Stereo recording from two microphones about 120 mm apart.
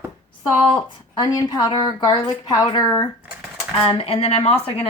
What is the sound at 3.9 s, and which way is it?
A woman's voice, 50° left (ahead or behind).